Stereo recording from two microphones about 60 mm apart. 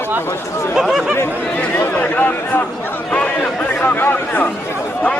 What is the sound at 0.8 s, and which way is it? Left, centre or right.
Speech, centre.